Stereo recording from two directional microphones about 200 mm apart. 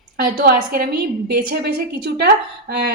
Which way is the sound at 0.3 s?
50° right (ahead or behind).